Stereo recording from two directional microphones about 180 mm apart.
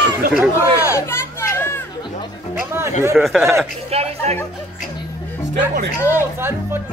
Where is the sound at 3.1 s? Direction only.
Centre (ahead or behind).